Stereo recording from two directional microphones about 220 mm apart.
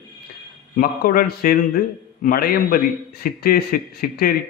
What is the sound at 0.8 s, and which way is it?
A man's voice, 40° left (ahead or behind).